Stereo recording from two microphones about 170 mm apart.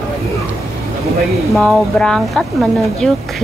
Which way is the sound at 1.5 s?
Centre (ahead or behind).